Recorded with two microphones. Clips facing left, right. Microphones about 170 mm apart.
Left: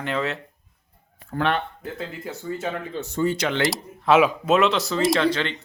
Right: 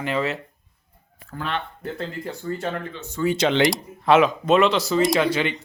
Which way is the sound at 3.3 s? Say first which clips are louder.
Right 4 dB; 25° right (ahead or behind).